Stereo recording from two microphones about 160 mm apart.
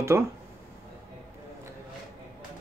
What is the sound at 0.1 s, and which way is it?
Speech, 15° right (ahead or behind).